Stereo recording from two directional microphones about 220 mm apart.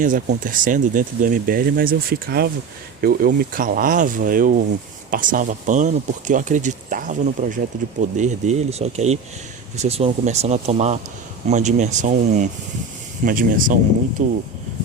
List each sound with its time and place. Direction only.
0.0 s speech: 35° right (ahead or behind)